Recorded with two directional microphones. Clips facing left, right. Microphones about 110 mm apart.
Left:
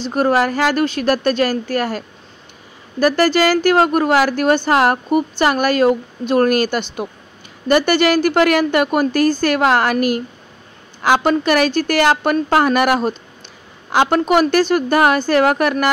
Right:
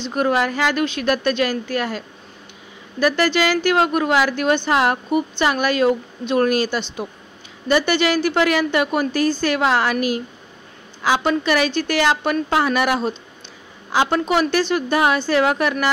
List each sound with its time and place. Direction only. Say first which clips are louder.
0.0 s a woman's voice: left 3 dB; 40° left (ahead or behind)